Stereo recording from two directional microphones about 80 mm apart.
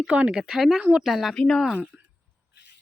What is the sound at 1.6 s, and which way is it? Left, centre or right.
Speech, centre.